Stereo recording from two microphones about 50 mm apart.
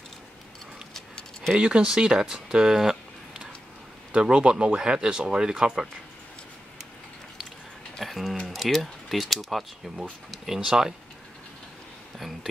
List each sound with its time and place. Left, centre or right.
0.9 s a sound: centre
1.5 s speech: right
4.1 s speech: centre
8.0 s speech: centre